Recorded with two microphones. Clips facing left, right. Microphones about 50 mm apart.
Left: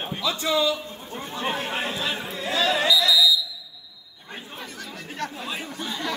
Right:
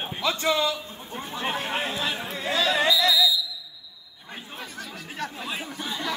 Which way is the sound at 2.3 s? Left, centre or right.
Right.